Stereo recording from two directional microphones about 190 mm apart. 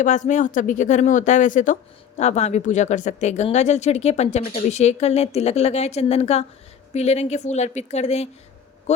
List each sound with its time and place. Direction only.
0.0 s speech: 40° left (ahead or behind)